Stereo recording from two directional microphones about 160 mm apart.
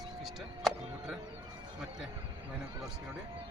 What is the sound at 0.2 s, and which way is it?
Music, centre (ahead or behind).